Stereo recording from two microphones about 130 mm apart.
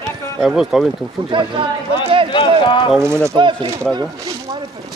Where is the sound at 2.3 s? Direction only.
40° left (ahead or behind).